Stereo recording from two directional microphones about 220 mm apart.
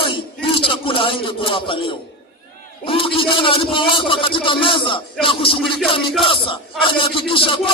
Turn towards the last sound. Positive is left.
turn(degrees=25)  # may be behind; listen again after turning